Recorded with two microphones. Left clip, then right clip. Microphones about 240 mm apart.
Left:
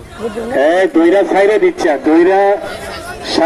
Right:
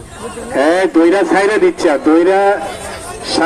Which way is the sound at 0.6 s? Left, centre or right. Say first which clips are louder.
Even; right.